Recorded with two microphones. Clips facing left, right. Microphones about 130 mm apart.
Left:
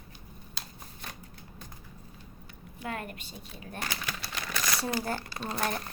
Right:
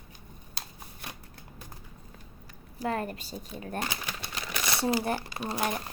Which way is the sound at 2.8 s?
35° right (ahead or behind).